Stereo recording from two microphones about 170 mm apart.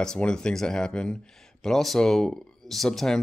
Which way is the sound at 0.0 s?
5° left (ahead or behind).